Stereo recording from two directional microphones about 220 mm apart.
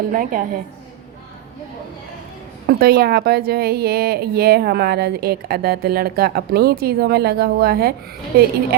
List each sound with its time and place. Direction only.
0.1 s a woman's voice: 40° right (ahead or behind)
2.6 s speech: 45° right (ahead or behind)